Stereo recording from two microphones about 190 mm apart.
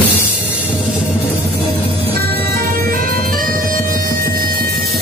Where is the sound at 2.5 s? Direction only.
50° right (ahead or behind).